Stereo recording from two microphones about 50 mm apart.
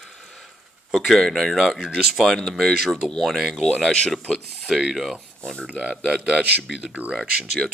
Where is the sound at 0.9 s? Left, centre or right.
Centre.